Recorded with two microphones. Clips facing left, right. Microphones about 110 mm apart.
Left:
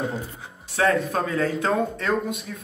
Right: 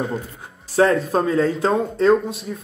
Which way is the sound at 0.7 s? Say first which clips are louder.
Right 5 dB; 30° right (ahead or behind).